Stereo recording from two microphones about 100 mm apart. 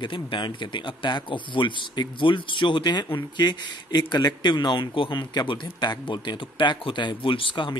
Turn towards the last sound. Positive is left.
turn(degrees=60)  # may be behind; listen again after turning